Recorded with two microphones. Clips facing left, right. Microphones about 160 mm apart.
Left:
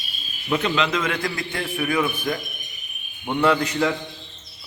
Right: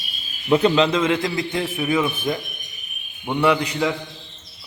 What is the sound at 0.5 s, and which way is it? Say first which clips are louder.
A man's voice: right 6 dB; 30° right (ahead or behind).